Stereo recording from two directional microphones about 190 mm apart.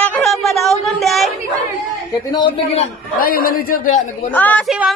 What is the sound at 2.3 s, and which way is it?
Speech, 25° left (ahead or behind).